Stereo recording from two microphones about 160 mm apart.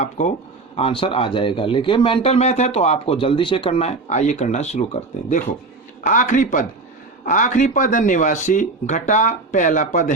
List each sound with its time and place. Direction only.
0.0 s speech: 50° left (ahead or behind)
0.8 s speech: 35° left (ahead or behind); by 10.1 s 50° left (ahead or behind)